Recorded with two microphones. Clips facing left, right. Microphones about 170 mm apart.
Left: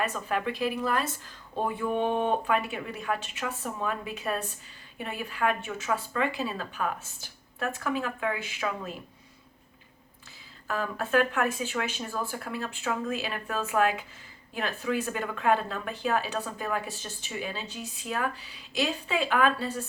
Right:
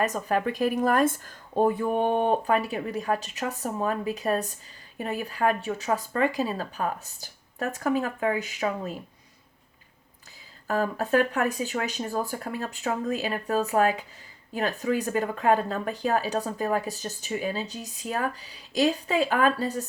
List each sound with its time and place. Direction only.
0.0 s speech: 40° right (ahead or behind)
10.7 s speech: 40° right (ahead or behind)